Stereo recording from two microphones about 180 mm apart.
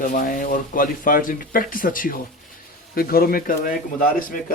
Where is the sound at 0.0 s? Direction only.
45° left (ahead or behind).